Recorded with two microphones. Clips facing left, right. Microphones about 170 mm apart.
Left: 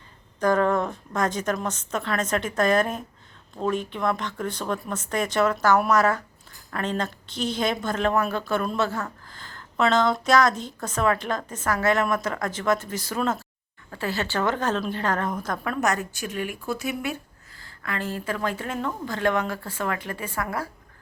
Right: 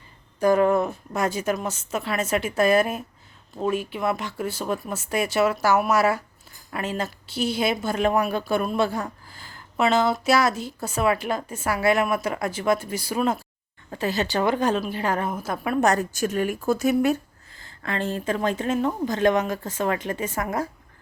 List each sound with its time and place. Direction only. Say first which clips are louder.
0.3 s speech: right 3 dB; 10° right (ahead or behind)
15.8 s a woman's voice: right 7 dB; 35° right (ahead or behind)
17.6 s a woman's voice: right 3 dB; 25° right (ahead or behind)